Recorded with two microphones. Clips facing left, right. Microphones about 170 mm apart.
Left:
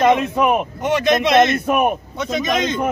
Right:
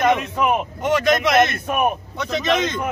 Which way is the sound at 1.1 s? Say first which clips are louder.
Left 3 dB; 25° left (ahead or behind).